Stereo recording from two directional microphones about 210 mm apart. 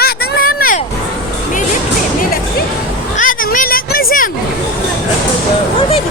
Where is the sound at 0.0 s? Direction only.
45° left (ahead or behind).